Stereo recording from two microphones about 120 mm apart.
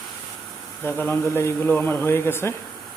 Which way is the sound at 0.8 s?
20° left (ahead or behind).